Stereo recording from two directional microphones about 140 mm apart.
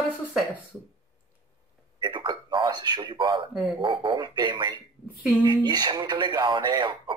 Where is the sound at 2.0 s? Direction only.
35° right (ahead or behind).